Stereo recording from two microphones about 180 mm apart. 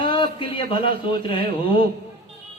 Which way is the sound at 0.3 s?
30° left (ahead or behind).